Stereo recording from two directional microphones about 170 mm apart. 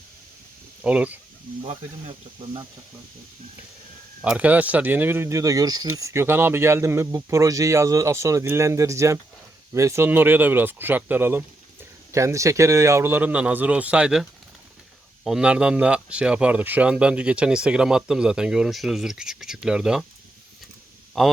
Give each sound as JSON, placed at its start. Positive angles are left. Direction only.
{"t": 0.8, "sound": "speech", "side_deg": -10}
{"t": 1.6, "sound": "speech", "side_deg": -30}
{"t": 4.2, "sound": "speech", "side_deg": -10}
{"t": 21.2, "sound": "speech", "side_deg": 0}